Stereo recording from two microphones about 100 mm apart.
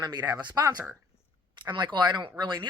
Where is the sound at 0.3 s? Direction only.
40° right (ahead or behind).